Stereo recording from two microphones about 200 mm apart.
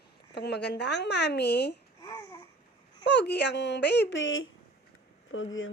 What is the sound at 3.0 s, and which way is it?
Speech, 60° left (ahead or behind).